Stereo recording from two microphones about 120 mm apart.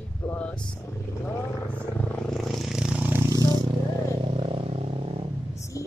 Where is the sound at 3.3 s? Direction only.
30° right (ahead or behind).